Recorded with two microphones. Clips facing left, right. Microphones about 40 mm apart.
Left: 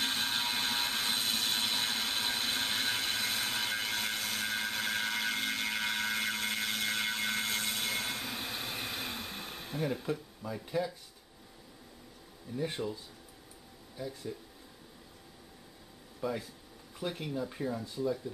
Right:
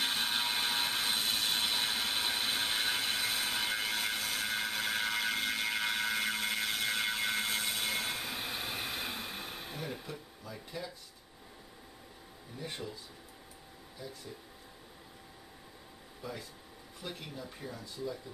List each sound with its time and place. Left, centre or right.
0.0 s a sound: centre
10.4 s speech: centre
12.5 s speech: centre
13.9 s speech: centre
16.2 s speech: centre